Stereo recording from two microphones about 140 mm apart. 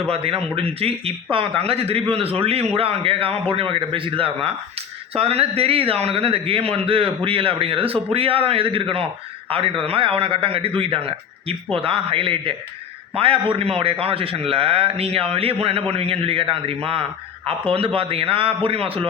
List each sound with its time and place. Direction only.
0.1 s a man's voice: 45° right (ahead or behind)